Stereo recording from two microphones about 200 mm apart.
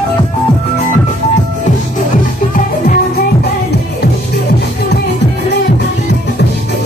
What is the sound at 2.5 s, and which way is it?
Music, 45° left (ahead or behind).